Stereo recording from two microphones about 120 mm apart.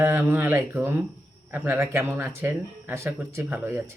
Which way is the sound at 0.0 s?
20° right (ahead or behind).